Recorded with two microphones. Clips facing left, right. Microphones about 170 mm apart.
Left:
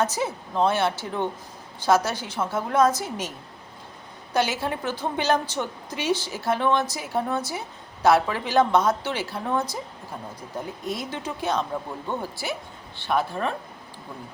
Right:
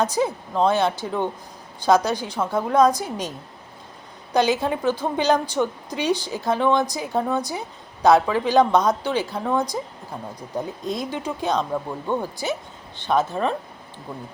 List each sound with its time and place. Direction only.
0.0 s a woman's voice: 15° right (ahead or behind)
4.4 s a woman's voice: 15° right (ahead or behind)
10.8 s a woman's voice: 15° right (ahead or behind)